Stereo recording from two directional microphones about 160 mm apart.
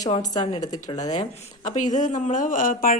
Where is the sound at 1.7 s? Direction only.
50° left (ahead or behind).